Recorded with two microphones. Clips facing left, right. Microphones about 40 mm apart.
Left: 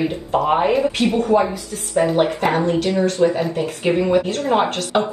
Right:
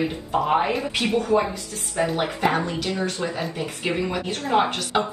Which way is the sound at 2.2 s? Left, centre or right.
Left.